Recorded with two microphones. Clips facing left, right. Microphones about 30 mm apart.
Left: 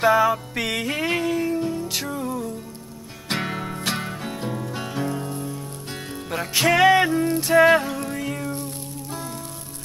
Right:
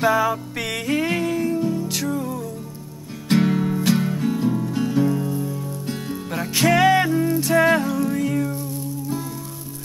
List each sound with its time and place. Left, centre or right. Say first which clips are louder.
0.0 s music: left 1 dB; centre